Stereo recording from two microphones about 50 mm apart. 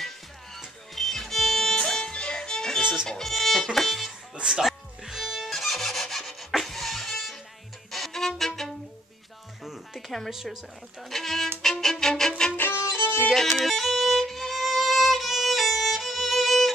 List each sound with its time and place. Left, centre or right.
0.9 s music: centre
4.5 s music: centre
7.9 s violin: centre
9.9 s a sound: centre
10.3 s a woman's voice: centre
11.1 s speech: centre
11.6 s violin: centre
12.9 s music: left
13.3 s violin: centre